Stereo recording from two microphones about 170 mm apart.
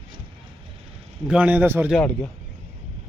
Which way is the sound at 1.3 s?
10° right (ahead or behind).